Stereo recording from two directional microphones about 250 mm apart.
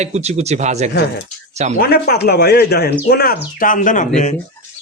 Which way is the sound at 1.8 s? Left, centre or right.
Left.